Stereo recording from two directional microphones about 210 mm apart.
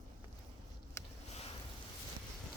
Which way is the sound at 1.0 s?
15° left (ahead or behind).